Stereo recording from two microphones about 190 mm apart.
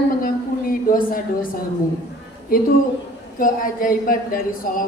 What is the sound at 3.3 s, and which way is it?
A woman's voice, 45° left (ahead or behind).